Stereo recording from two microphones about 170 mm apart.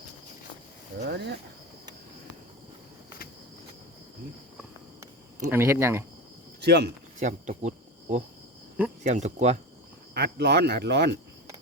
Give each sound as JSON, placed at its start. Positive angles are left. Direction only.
{"t": 0.9, "sound": "speech", "side_deg": -85}
{"t": 5.5, "sound": "speech", "side_deg": -15}
{"t": 6.6, "sound": "speech", "side_deg": -70}
{"t": 7.2, "sound": "speech", "side_deg": -45}
{"t": 10.2, "sound": "speech", "side_deg": -75}